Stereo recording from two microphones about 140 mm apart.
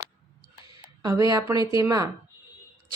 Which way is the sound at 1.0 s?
25° right (ahead or behind).